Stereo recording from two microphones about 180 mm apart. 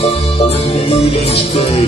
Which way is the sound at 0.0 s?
35° left (ahead or behind).